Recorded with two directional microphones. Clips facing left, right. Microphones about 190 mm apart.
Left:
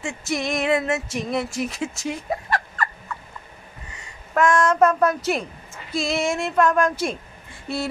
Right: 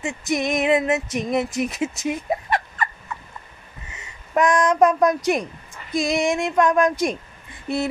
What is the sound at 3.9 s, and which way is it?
A woman's voice, 20° right (ahead or behind).